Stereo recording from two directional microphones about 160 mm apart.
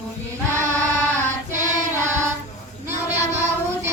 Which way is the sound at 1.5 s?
50° right (ahead or behind).